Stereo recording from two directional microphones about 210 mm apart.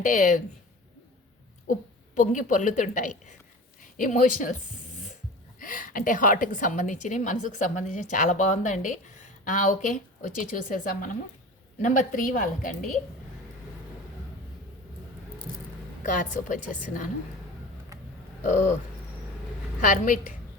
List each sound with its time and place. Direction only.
0.0 s a woman's voice: 35° left (ahead or behind)
2.1 s a woman's voice: 35° left (ahead or behind)
5.5 s a woman's voice: 40° left (ahead or behind)
16.0 s a woman's voice: 35° left (ahead or behind)
18.4 s a woman's voice: 35° left (ahead or behind)
19.8 s a woman's voice: 35° left (ahead or behind)